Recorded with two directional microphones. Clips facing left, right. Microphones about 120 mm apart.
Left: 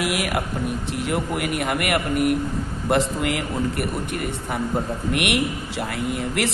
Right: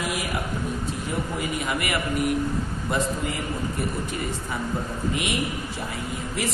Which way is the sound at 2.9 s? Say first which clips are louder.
Left 6 dB; 75° left (ahead or behind).